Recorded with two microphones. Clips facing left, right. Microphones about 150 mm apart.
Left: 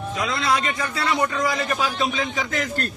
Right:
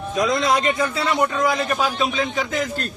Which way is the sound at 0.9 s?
10° right (ahead or behind).